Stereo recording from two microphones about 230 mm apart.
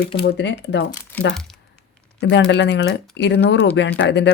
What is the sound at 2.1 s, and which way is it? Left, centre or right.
Speech, left.